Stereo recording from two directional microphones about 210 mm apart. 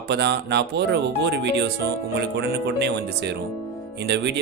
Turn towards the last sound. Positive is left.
turn(degrees=-55)  # may be behind; listen again after turning